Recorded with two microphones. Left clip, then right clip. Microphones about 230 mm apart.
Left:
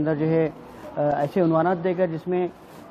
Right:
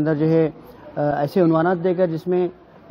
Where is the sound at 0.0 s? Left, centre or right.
Right.